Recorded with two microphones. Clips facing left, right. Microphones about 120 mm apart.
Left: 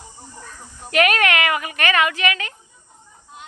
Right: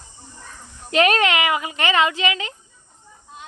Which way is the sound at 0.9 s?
25° right (ahead or behind).